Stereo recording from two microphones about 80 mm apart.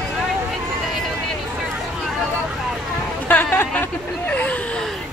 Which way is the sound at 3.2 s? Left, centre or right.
Left.